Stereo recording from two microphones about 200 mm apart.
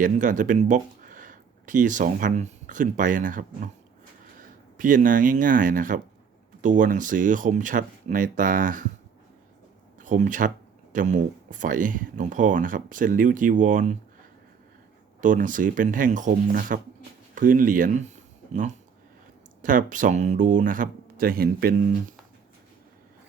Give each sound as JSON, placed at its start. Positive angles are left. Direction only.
{"t": 0.0, "sound": "speech", "side_deg": -40}
{"t": 10.0, "sound": "speech", "side_deg": -40}
{"t": 15.2, "sound": "speech", "side_deg": -40}